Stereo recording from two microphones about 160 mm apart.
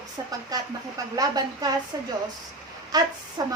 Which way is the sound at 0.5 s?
25° right (ahead or behind).